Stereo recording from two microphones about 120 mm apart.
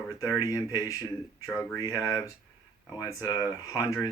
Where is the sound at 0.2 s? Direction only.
30° left (ahead or behind).